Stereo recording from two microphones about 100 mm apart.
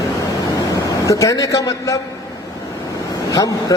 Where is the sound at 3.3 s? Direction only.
35° left (ahead or behind).